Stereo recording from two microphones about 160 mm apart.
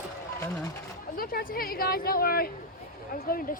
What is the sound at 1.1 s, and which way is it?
Speech, 65° left (ahead or behind).